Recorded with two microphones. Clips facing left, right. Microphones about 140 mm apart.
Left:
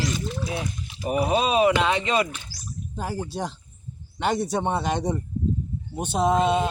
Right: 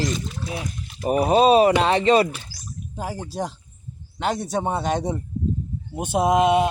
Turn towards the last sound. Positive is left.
turn(degrees=-15)  # may be behind; listen again after turning